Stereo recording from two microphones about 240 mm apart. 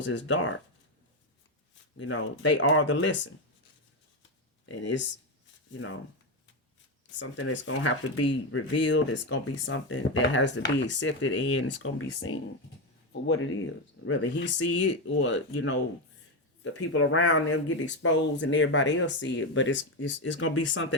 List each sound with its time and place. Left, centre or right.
0.0 s speech: left
2.0 s speech: left
7.1 s speech: left
16.9 s speech: left